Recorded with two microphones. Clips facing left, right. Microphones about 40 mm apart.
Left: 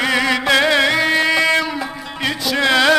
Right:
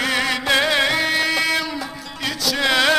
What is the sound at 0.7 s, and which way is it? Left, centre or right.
Music, centre.